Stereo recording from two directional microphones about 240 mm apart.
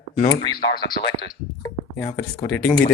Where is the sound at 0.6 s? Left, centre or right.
Centre.